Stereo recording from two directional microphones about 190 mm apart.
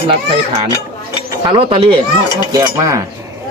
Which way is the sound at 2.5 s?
15° right (ahead or behind).